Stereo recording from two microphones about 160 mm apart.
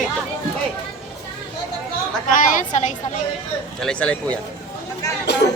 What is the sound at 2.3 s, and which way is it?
Speech, 50° left (ahead or behind).